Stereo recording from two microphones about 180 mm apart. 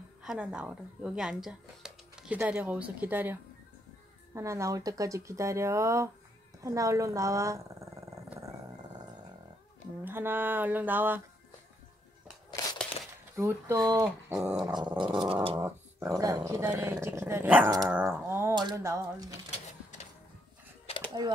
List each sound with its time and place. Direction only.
0.2 s a woman's voice: 5° right (ahead or behind)
6.6 s dog: 20° right (ahead or behind)
10.0 s a woman's voice: 10° right (ahead or behind)
12.6 s crushing: 20° left (ahead or behind)
13.4 s a woman's voice: 15° right (ahead or behind)
14.6 s dog: 25° right (ahead or behind)
15.6 s a woman's voice: 20° right (ahead or behind)
17.6 s dog: 20° right (ahead or behind)
17.9 s speech: 10° right (ahead or behind)
21.2 s dog: 20° right (ahead or behind)